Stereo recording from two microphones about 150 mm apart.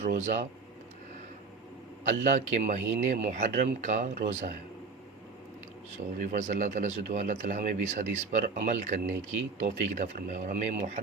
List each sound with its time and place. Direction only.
0.0 s speech: 55° right (ahead or behind)
2.0 s speech: 55° right (ahead or behind)
6.1 s speech: 60° right (ahead or behind)